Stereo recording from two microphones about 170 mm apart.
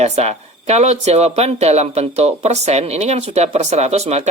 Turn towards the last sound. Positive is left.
turn(degrees=-40)  # may be behind; listen again after turning